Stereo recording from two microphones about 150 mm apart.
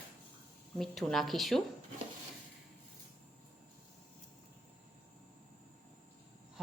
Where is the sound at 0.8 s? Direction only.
Centre (ahead or behind).